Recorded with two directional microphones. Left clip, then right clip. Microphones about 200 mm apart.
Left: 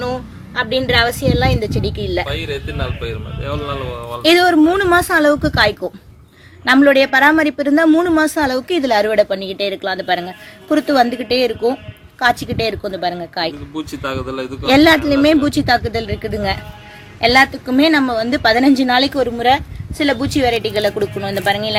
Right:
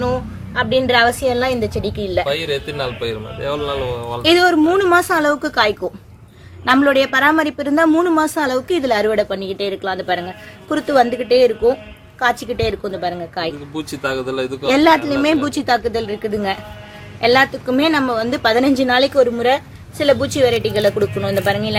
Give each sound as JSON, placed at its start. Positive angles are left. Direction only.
{"t": 0.0, "sound": "a woman's voice", "side_deg": 30}
{"t": 2.3, "sound": "speech", "side_deg": -15}
{"t": 4.2, "sound": "a woman's voice", "side_deg": 25}
{"t": 13.7, "sound": "speech", "side_deg": -10}
{"t": 14.7, "sound": "a woman's voice", "side_deg": 30}